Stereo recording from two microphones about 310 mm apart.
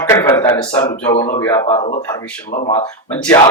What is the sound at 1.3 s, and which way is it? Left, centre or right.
Speech, centre.